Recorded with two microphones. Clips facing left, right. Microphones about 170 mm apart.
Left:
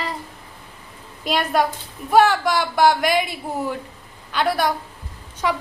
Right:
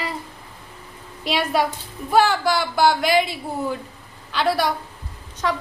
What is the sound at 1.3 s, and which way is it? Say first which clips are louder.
A woman's voice: left 1 dB; centre (ahead or behind).